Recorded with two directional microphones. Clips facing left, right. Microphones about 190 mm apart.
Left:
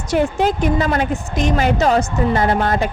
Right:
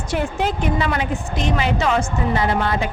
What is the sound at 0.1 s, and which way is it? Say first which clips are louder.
A woman's voice: left 6 dB; 40° left (ahead or behind).